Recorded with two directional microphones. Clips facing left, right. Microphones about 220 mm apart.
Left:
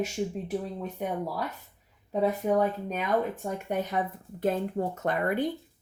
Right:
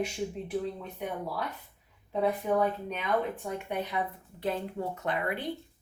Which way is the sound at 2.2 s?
40° left (ahead or behind).